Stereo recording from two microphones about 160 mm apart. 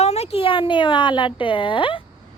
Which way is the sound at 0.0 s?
40° left (ahead or behind).